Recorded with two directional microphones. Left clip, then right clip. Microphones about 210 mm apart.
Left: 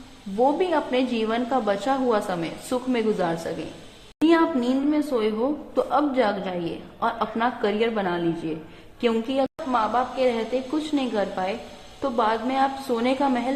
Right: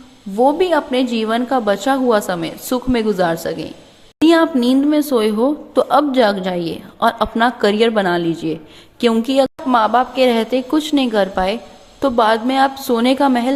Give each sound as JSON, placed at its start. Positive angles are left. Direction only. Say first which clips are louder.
{"t": 0.3, "sound": "a woman's voice", "louder": "right 7 dB", "side_deg": -25}